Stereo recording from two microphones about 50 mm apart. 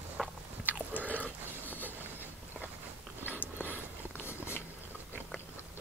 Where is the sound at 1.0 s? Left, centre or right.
Left.